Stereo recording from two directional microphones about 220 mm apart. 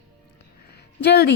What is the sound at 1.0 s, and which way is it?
Speech, 45° left (ahead or behind).